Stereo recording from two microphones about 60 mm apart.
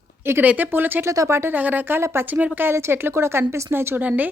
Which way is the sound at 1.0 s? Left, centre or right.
Right.